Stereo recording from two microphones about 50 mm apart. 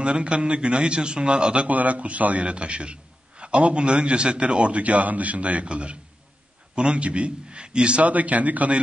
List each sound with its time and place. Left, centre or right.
0.0 s a man's voice: right